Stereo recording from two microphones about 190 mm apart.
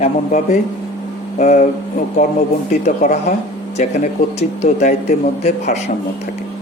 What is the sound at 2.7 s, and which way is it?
Speech, 40° left (ahead or behind).